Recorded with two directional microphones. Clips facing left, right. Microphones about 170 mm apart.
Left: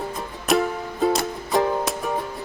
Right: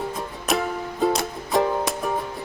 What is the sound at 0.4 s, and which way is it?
Music, centre (ahead or behind).